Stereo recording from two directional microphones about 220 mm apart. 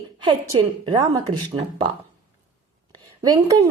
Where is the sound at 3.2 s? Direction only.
15° right (ahead or behind).